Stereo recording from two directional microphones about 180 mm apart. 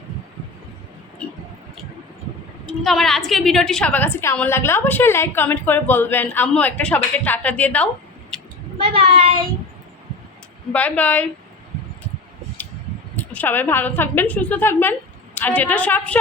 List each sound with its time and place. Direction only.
2.6 s a woman's voice: centre (ahead or behind)
8.3 s a sound: 5° left (ahead or behind)
8.8 s speech: 30° right (ahead or behind)
10.7 s a woman's voice: 10° left (ahead or behind)
13.1 s a woman's voice: 10° left (ahead or behind)